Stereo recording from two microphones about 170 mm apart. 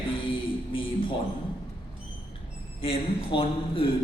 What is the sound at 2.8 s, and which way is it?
A man's voice, 30° left (ahead or behind).